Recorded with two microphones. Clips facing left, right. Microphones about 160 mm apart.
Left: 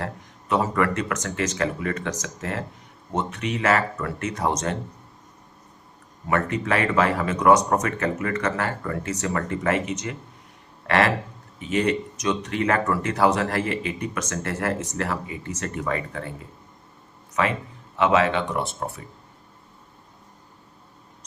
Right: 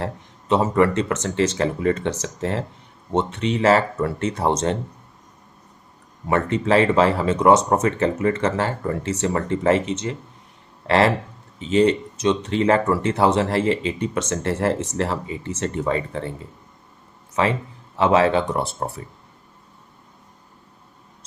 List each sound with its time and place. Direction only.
0.0 s speech: 25° right (ahead or behind)
6.2 s speech: 30° right (ahead or behind)
17.3 s speech: 30° right (ahead or behind)